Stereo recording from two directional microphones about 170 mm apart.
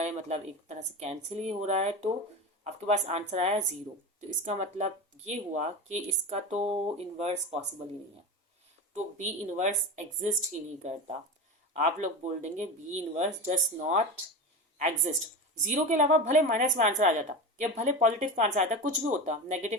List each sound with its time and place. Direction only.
0.0 s speech: 40° right (ahead or behind)
9.0 s a woman's voice: 45° right (ahead or behind)